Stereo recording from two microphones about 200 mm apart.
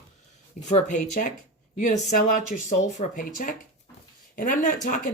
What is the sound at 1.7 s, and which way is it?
Speech, 40° left (ahead or behind).